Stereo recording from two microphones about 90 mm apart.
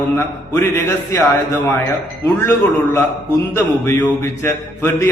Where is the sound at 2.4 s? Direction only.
30° left (ahead or behind).